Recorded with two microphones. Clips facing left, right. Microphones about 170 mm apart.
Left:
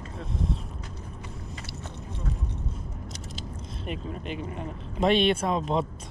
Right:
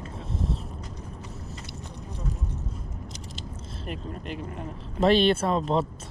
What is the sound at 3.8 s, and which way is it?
Speech, centre (ahead or behind).